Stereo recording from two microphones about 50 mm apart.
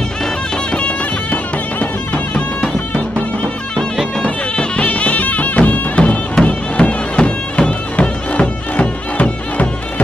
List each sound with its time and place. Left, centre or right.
0.7 s music: left
4.2 s music: left
6.3 s bagpipes: left